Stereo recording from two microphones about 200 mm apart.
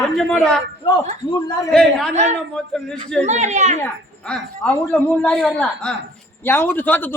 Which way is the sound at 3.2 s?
35° right (ahead or behind).